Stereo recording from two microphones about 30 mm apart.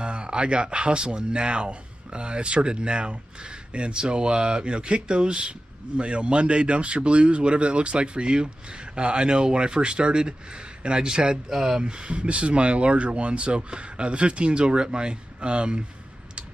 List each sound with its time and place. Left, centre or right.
0.0 s speech: right
11.4 s speech: centre
11.8 s speech: right